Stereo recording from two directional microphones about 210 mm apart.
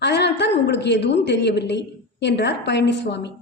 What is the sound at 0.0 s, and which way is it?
A woman's voice, 55° left (ahead or behind).